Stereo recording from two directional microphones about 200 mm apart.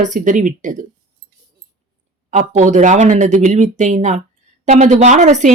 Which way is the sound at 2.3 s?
35° right (ahead or behind).